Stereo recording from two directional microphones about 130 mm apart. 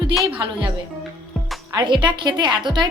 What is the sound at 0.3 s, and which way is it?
Speech, 40° right (ahead or behind).